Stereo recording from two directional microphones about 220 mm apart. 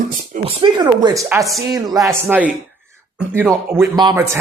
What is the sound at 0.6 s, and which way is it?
Speech, 20° right (ahead or behind).